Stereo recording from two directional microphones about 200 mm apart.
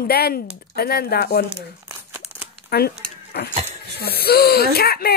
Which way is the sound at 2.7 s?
55° left (ahead or behind).